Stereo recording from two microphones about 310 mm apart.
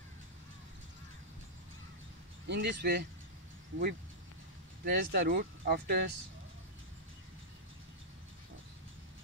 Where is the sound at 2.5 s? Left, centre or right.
Right.